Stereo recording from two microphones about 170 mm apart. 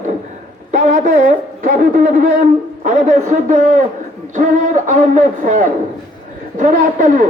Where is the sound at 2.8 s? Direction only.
50° right (ahead or behind).